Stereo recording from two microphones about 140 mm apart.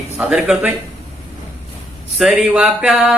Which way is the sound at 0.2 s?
5° right (ahead or behind).